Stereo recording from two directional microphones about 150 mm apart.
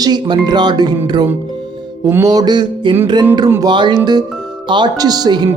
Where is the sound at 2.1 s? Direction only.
20° right (ahead or behind).